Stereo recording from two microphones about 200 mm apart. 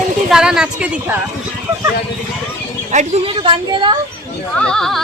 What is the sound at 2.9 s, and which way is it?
Speech, 35° right (ahead or behind).